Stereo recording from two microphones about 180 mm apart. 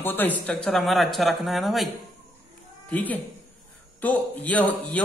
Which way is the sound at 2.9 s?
10° left (ahead or behind).